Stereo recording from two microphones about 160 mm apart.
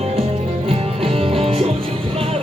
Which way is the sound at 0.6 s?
35° right (ahead or behind).